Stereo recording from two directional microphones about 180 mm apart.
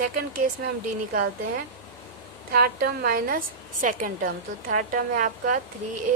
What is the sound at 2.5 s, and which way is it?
A woman's voice, 60° right (ahead or behind).